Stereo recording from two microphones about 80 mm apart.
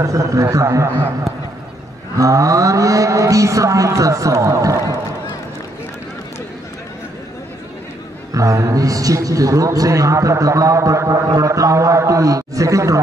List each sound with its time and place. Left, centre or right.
0.0 s a man's voice: right
2.1 s a man's voice: right
8.3 s a man's voice: right